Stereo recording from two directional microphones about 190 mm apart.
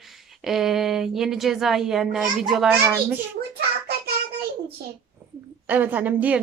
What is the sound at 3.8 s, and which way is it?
Child singing, 55° right (ahead or behind).